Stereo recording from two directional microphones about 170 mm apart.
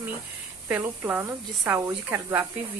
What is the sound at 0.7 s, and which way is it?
Speech, 10° right (ahead or behind).